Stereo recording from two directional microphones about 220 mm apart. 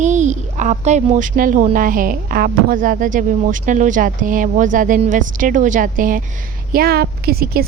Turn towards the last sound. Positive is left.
turn(degrees=-45)  # may be behind; listen again after turning